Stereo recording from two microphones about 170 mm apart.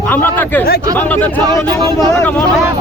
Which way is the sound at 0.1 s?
10° left (ahead or behind).